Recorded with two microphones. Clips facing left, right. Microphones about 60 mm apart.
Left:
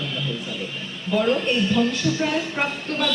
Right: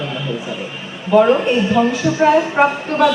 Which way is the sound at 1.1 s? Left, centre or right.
Right.